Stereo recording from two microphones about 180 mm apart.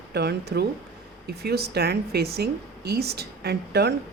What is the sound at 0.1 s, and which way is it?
A woman's voice, 65° right (ahead or behind).